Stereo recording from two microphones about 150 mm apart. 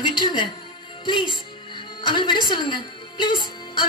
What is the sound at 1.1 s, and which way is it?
A woman's voice, 30° left (ahead or behind).